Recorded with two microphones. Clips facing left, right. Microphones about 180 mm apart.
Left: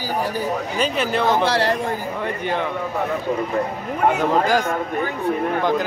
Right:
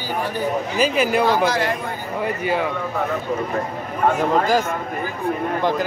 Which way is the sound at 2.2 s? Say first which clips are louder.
Right 6 dB; 5° right (ahead or behind).